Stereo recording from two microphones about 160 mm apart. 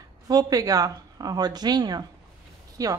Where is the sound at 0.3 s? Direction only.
25° right (ahead or behind).